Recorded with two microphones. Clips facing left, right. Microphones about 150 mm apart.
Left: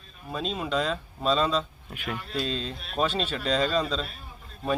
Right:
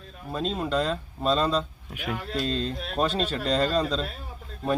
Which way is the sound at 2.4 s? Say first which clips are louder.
Right 3 dB; 5° left (ahead or behind).